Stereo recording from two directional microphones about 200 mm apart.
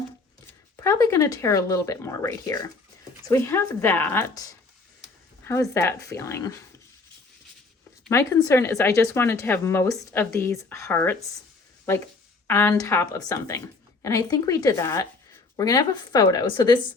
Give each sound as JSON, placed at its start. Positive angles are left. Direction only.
{"t": 0.9, "sound": "speech", "side_deg": 15}
{"t": 5.5, "sound": "speech", "side_deg": 15}
{"t": 8.1, "sound": "speech", "side_deg": 15}
{"t": 12.5, "sound": "speech", "side_deg": 10}